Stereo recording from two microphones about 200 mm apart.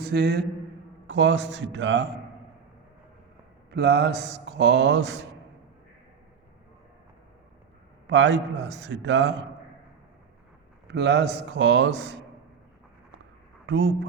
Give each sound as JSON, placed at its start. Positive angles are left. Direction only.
{"t": 0.0, "sound": "mantra", "side_deg": -55}
{"t": 1.0, "sound": "speech", "side_deg": -60}
{"t": 3.7, "sound": "speech", "side_deg": -55}
{"t": 8.0, "sound": "speech", "side_deg": -65}
{"t": 10.8, "sound": "speech", "side_deg": -55}
{"t": 13.7, "sound": "speech", "side_deg": -65}